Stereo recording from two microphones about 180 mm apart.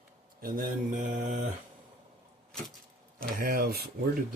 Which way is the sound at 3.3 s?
55° right (ahead or behind).